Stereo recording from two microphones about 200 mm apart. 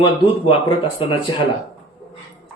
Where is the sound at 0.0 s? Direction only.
25° left (ahead or behind).